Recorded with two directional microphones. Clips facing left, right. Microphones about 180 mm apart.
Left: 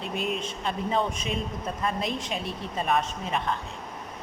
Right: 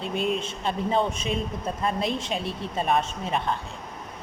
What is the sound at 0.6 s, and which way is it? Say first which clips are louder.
A man's voice: right 2 dB; 30° right (ahead or behind).